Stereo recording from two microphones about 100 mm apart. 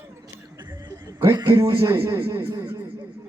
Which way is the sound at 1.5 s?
30° right (ahead or behind).